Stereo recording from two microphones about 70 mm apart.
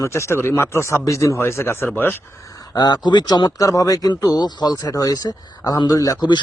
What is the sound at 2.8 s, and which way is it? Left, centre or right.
Speech, left.